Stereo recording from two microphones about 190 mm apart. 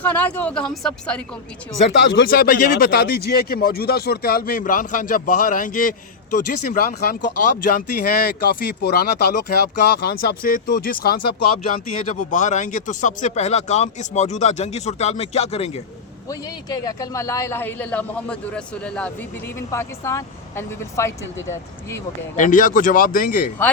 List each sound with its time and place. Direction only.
0.0 s speech: 10° left (ahead or behind)
1.8 s speech: 65° left (ahead or behind)
12.0 s speech: 40° left (ahead or behind)
16.3 s speech: 20° left (ahead or behind)
22.4 s speech: 45° left (ahead or behind)